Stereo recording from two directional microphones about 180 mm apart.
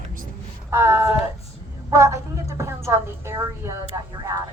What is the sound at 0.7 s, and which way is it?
Speech, 15° right (ahead or behind).